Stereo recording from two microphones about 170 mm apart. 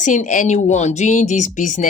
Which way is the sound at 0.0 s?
45° left (ahead or behind).